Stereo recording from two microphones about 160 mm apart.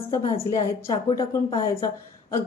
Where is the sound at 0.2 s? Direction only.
35° left (ahead or behind).